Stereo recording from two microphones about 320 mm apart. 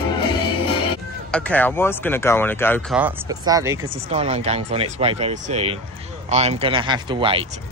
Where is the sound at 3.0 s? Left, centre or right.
Centre.